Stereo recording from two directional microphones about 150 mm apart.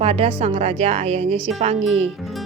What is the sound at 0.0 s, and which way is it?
A woman's voice, 40° right (ahead or behind).